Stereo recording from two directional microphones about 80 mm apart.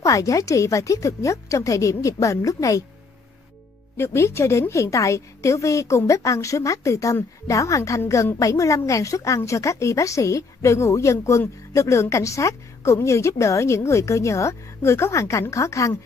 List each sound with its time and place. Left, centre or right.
0.0 s speech: left
3.9 s speech: left